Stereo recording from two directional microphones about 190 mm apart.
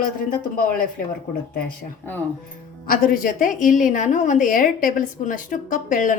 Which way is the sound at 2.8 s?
45° left (ahead or behind).